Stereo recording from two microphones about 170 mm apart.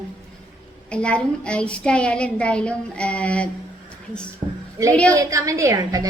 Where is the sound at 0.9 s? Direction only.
5° left (ahead or behind).